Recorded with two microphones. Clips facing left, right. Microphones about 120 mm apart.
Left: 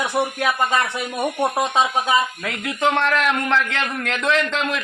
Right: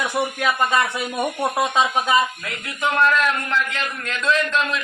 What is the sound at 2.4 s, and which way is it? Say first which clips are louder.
A man's voice: left 4 dB; 90° left.